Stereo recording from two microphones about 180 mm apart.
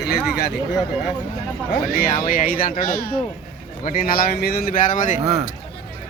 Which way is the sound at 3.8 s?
55° left (ahead or behind).